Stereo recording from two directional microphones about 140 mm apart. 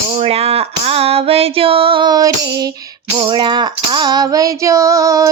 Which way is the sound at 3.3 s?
35° right (ahead or behind).